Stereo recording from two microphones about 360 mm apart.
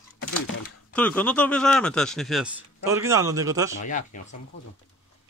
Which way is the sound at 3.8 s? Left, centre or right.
Left.